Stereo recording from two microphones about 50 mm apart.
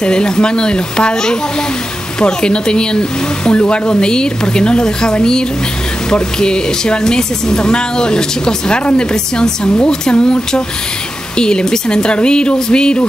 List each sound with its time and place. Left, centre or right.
0.0 s speech: centre